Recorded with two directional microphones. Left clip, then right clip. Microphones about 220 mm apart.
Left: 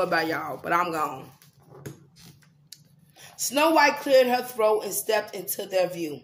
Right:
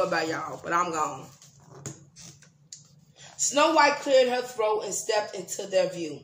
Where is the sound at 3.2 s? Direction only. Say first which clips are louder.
Even; 40° left (ahead or behind).